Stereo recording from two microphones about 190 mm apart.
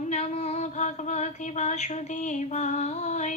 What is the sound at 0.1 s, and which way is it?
Female singing, 35° left (ahead or behind).